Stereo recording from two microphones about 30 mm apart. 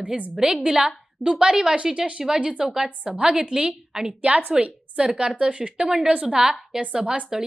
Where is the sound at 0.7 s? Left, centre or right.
Right.